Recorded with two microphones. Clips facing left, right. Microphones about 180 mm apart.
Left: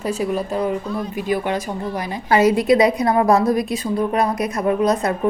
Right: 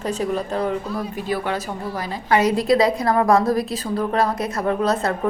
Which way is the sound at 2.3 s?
25° left (ahead or behind).